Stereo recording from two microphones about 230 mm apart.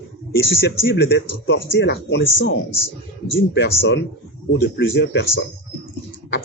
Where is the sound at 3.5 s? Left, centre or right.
Left.